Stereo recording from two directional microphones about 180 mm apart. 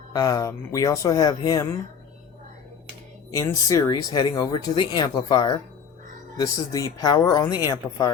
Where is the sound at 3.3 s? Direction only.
15° left (ahead or behind).